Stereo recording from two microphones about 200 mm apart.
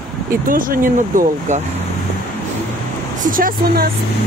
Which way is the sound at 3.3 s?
45° right (ahead or behind).